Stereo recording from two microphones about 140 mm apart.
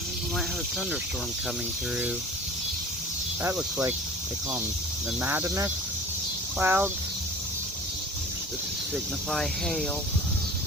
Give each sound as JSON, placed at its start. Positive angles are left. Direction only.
{"t": 3.4, "sound": "speech", "side_deg": -15}
{"t": 5.2, "sound": "speech", "side_deg": -15}
{"t": 9.3, "sound": "speech", "side_deg": 5}